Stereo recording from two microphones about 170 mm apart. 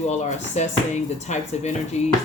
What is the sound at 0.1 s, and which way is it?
Speech, 40° left (ahead or behind).